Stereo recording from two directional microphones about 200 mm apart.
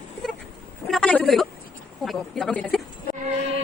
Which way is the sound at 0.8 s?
Centre (ahead or behind).